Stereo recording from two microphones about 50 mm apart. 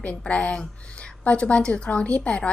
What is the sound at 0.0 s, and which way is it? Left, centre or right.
A woman's voice, left.